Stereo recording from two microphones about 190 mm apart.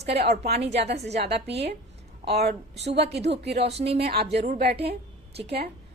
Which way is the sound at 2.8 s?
35° right (ahead or behind).